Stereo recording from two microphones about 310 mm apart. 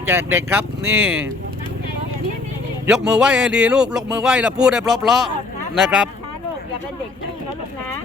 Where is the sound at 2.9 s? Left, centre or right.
Centre.